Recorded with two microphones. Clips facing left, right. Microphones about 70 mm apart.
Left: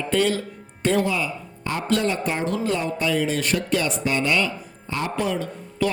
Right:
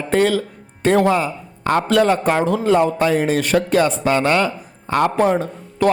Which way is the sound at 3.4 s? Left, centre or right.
Right.